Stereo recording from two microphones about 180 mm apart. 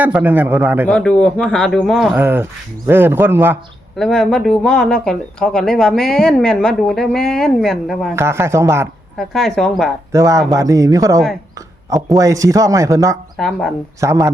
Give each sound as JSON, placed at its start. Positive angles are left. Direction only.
{"t": 0.0, "sound": "speech", "side_deg": -10}
{"t": 0.9, "sound": "speech", "side_deg": 5}
{"t": 2.1, "sound": "speech", "side_deg": -10}
{"t": 3.9, "sound": "speech", "side_deg": 0}
{"t": 8.1, "sound": "speech", "side_deg": -15}
{"t": 9.1, "sound": "speech", "side_deg": 0}
{"t": 10.1, "sound": "speech", "side_deg": -15}
{"t": 13.3, "sound": "speech", "side_deg": 0}
{"t": 14.0, "sound": "speech", "side_deg": -15}